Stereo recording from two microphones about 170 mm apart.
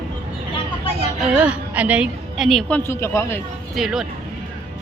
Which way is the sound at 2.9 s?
15° left (ahead or behind).